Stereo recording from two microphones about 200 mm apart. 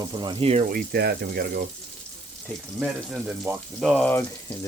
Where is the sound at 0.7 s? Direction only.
50° right (ahead or behind).